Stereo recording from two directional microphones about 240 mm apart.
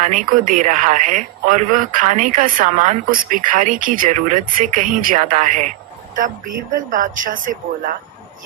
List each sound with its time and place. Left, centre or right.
0.0 s speech: right
6.7 s speech: right